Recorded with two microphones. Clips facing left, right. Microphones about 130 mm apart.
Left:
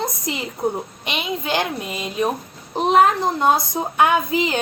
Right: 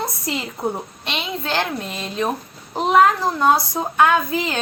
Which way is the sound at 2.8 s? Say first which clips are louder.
Even; 20° left (ahead or behind).